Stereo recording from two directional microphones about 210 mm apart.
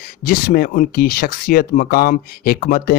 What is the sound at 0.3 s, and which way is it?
Speech, 45° left (ahead or behind).